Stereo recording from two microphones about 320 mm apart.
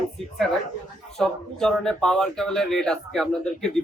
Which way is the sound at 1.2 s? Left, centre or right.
Centre.